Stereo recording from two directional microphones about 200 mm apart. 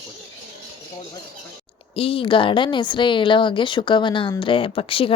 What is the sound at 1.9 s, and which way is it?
Speech, 30° left (ahead or behind).